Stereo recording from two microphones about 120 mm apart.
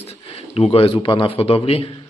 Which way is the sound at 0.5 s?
55° left (ahead or behind).